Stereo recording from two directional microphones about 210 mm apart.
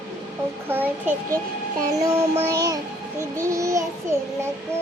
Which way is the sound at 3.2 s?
15° right (ahead or behind).